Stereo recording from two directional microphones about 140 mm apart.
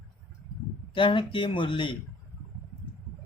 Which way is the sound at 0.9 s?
35° left (ahead or behind).